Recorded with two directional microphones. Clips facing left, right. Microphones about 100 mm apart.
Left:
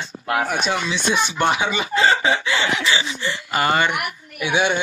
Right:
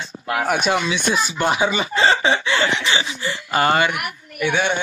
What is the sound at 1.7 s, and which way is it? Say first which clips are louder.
Chicken: even; 35° right (ahead or behind).